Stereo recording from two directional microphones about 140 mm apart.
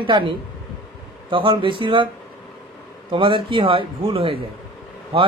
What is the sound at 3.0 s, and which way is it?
A man's voice, 35° right (ahead or behind).